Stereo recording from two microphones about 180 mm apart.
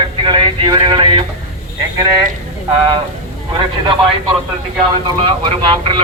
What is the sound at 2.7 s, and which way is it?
Speech, 25° right (ahead or behind).